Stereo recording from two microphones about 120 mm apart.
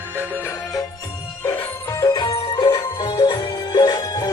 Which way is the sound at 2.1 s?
40° left (ahead or behind).